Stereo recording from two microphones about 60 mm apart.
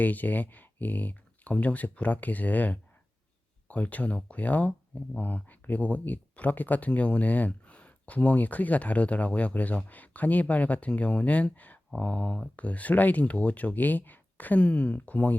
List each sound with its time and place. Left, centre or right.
0.0 s speech: left